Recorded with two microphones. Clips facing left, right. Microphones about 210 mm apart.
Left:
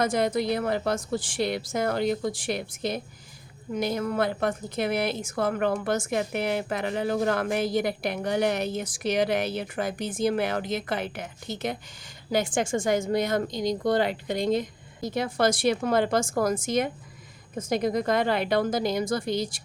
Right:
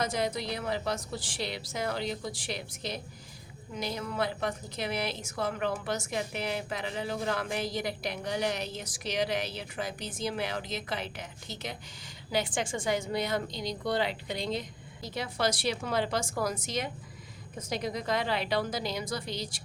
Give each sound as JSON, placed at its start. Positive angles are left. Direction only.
{"t": 0.0, "sound": "a woman's voice", "side_deg": 50}